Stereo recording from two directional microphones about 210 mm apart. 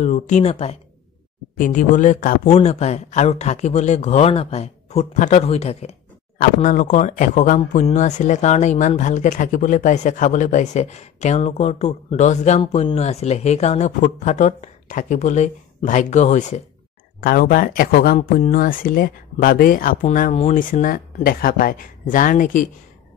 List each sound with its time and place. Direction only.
0.0 s speech: 35° left (ahead or behind)